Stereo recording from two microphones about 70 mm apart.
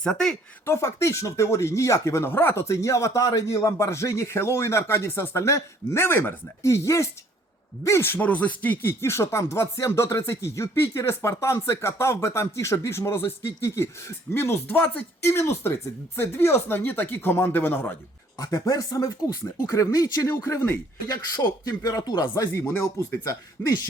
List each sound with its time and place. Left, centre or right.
0.0 s speech: centre
0.6 s speech: left
6.7 s speech: left
18.3 s speech: left
21.1 s speech: left
23.2 s speech: left